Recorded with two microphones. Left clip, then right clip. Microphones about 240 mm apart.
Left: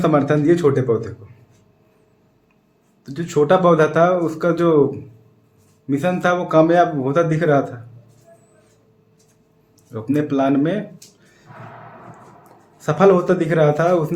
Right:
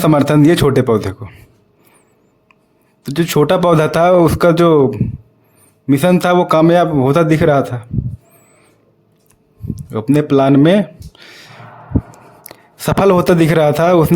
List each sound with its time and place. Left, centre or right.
0.0 s speech: right
3.0 s speech: right
9.9 s speech: right
12.8 s speech: right